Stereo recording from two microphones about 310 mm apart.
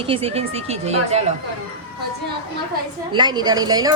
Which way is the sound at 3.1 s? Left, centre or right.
Centre.